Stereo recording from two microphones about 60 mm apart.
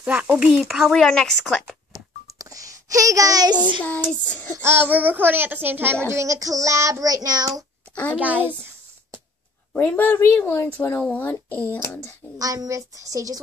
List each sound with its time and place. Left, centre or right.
0.0 s speech: right
0.7 s speech: centre
0.9 s a woman's voice: centre
2.3 s a sound: right
3.8 s speech: left
4.6 s a child's voice: right
4.8 s a child's voice: right
6.0 s child singing: right
7.9 s a child's voice: left
8.2 s a child's voice: right
9.8 s speech: left
11.1 s speech: left
12.4 s child singing: right